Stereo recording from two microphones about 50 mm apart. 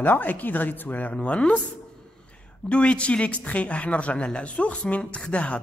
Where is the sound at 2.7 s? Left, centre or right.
Left.